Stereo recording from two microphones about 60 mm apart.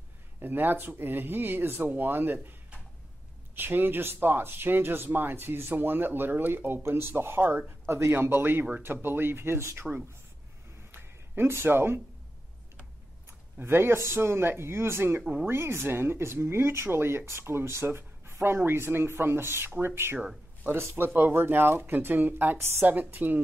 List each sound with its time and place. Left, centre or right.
0.4 s speech: right
3.5 s speech: right
10.9 s a sound: right
13.6 s speech: right